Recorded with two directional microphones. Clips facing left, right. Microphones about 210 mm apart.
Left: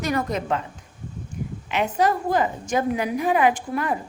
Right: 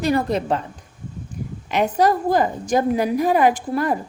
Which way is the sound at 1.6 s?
40° right (ahead or behind).